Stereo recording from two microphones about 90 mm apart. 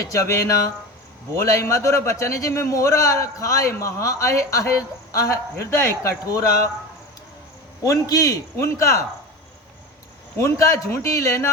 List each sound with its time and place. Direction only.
0.0 s a man's voice: 35° left (ahead or behind)
7.9 s a man's voice: 40° left (ahead or behind)
10.3 s a man's voice: 35° left (ahead or behind)